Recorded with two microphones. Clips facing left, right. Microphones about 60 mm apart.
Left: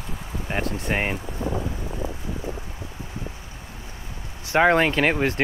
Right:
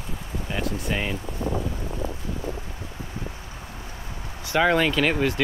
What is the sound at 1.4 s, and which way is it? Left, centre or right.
Wind, left.